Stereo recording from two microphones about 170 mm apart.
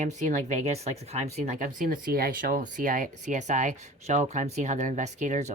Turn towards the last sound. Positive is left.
turn(degrees=-45)  # may be behind; listen again after turning